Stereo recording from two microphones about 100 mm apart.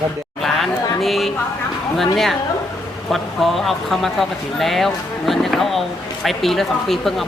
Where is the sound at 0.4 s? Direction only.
Centre (ahead or behind).